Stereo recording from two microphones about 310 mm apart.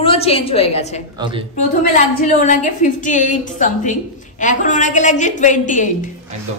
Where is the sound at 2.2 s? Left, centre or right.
Left.